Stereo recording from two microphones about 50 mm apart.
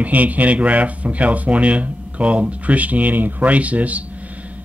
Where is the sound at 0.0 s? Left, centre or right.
Right.